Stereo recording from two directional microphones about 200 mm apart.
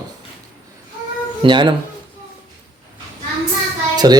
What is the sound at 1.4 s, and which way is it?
Speech, 25° right (ahead or behind).